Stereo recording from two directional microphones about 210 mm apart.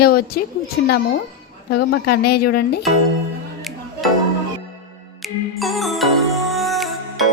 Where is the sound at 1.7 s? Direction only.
50° left (ahead or behind).